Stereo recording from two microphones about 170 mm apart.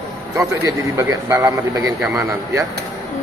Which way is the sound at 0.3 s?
20° right (ahead or behind).